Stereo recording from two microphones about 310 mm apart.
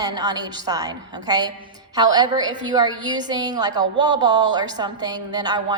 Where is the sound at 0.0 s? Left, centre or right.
Centre.